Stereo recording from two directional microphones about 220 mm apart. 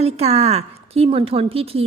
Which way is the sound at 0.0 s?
30° right (ahead or behind).